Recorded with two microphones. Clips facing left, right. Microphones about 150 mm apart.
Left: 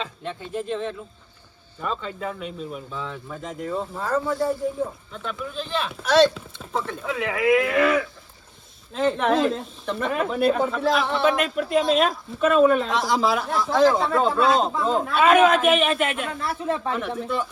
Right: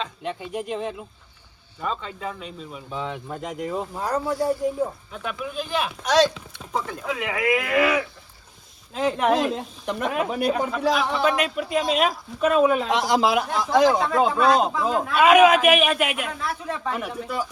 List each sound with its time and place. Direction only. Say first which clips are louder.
0.0 s speech: right 2 dB; 5° right (ahead or behind)
3.5 s speech: left 1 dB; 15° right (ahead or behind)
5.9 s speech: left 3 dB; centre (ahead or behind)
13.7 s speech: right 1 dB; 15° right (ahead or behind)
14.4 s speech: right 1 dB; centre (ahead or behind)